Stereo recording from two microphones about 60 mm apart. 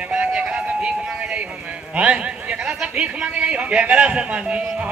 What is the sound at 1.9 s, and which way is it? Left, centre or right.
Speech, right.